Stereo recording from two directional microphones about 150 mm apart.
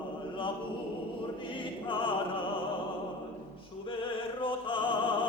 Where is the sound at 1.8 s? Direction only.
35° left (ahead or behind).